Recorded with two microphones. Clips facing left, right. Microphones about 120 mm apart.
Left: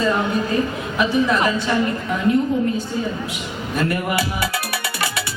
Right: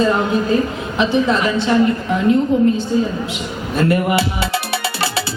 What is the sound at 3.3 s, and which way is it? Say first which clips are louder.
Music: right 4 dB; 25° right (ahead or behind).